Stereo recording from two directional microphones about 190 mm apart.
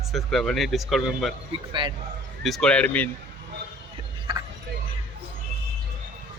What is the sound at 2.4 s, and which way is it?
Speech, 5° left (ahead or behind).